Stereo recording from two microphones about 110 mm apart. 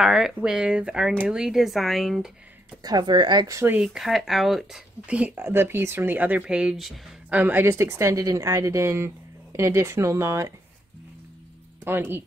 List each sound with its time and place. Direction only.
0.0 s speech: 5° right (ahead or behind)
2.8 s a woman's voice: 40° right (ahead or behind)
3.4 s a woman's voice: 30° right (ahead or behind)
3.8 s a woman's voice: 5° right (ahead or behind); by 10.5 s 25° right (ahead or behind)
11.8 s speech: 20° right (ahead or behind)